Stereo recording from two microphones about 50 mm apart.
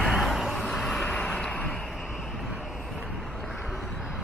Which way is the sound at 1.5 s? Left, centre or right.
Left.